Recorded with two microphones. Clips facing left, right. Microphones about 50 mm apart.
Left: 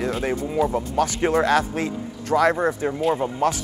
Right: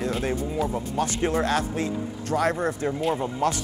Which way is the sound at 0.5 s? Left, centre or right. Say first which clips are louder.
Left 5 dB; left.